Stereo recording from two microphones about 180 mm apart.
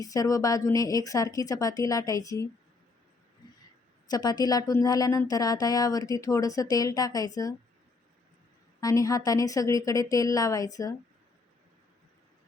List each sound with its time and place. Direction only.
0.0 s speech: 20° left (ahead or behind)
4.1 s speech: 20° left (ahead or behind)
8.8 s speech: 20° left (ahead or behind)